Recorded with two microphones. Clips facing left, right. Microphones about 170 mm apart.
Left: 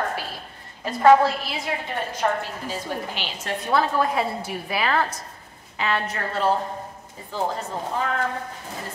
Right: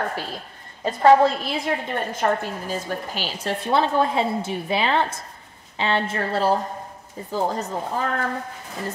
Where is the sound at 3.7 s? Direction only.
25° right (ahead or behind).